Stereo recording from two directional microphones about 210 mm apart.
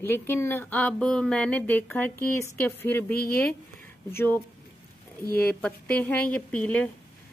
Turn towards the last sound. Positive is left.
turn(degrees=5)  # may be behind; listen again after turning